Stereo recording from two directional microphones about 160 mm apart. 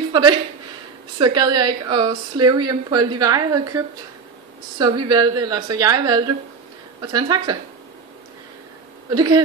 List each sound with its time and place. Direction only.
0.1 s a woman's voice: 25° right (ahead or behind)
9.1 s a woman's voice: 25° right (ahead or behind)